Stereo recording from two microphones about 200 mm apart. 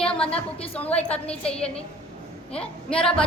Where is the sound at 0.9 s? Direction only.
5° left (ahead or behind).